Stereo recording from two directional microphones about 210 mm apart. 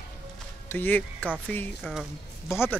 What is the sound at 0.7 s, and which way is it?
Music, 10° left (ahead or behind).